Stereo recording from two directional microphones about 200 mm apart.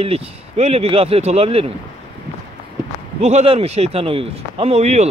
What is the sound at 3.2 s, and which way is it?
A man's voice, 35° right (ahead or behind).